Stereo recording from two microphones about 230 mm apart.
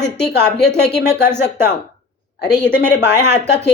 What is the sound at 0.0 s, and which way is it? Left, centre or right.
Speech, left.